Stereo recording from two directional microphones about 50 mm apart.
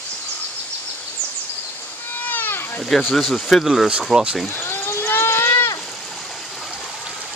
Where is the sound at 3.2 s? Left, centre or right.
Centre.